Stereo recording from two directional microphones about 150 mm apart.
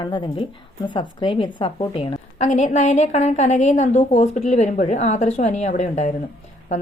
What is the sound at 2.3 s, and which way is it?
A woman's voice, 50° left (ahead or behind).